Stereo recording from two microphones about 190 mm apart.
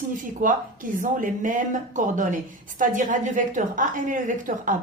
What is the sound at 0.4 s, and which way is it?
A woman's voice, 45° right (ahead or behind).